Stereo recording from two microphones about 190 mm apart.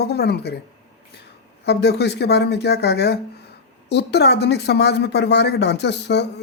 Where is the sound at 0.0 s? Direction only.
60° left (ahead or behind).